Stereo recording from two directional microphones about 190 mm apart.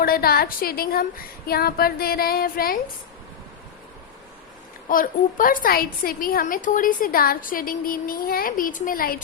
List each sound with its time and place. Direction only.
0.0 s a woman's voice: 50° left (ahead or behind)
4.9 s a woman's voice: 45° left (ahead or behind)